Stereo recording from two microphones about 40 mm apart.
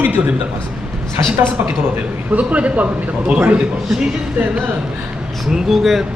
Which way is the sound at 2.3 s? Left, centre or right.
Right.